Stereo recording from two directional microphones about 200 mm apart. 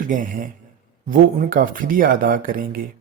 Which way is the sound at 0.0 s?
40° right (ahead or behind).